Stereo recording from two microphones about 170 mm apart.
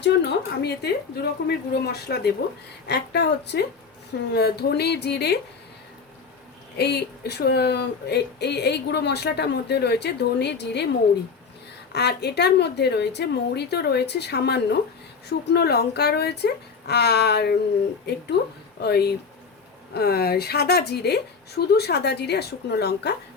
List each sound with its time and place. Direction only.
0.0 s a woman's voice: 80° left
6.7 s speech: 75° left (ahead or behind)
11.9 s speech: 75° left (ahead or behind)
18.8 s speech: 70° left (ahead or behind)